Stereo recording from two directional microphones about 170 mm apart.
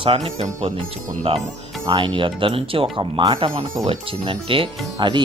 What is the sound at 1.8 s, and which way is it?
Speech, 25° right (ahead or behind).